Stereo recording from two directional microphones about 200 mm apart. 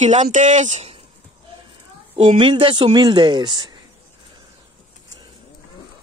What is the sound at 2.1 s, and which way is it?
Speech, 30° right (ahead or behind).